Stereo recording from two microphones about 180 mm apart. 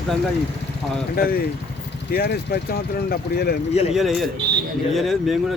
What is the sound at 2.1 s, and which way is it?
Speech, 65° left (ahead or behind).